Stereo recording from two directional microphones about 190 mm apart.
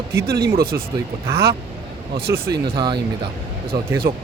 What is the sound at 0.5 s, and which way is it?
Speech, 50° right (ahead or behind).